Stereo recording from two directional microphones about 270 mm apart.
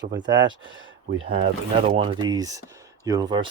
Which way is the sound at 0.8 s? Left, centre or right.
Right.